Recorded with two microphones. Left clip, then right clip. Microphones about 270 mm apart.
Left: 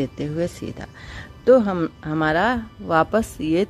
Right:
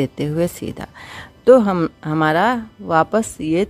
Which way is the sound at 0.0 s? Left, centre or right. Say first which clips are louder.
Right 5 dB; centre.